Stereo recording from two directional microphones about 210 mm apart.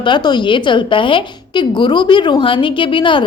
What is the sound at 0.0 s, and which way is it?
A woman's voice, 20° left (ahead or behind).